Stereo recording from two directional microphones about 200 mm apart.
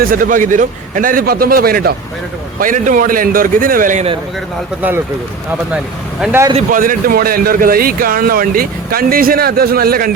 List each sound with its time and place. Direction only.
0.0 s speech: 45° right (ahead or behind)
5.7 s speech: 5° right (ahead or behind)
6.7 s speech: 45° right (ahead or behind)